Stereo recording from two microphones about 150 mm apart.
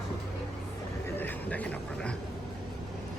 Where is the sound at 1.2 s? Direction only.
10° left (ahead or behind).